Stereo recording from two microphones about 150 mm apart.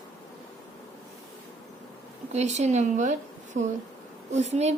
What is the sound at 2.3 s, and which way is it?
Speech, 50° right (ahead or behind).